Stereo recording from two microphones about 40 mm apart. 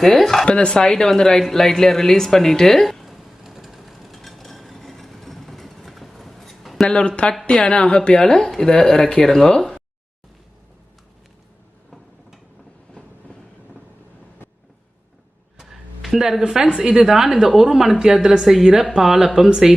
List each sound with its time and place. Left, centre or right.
0.0 s speech: centre
0.4 s a sound: left; by 6.8 s centre
6.8 s a woman's voice: left
9.2 s speech: centre
15.6 s music: centre
16.5 s a woman's voice: centre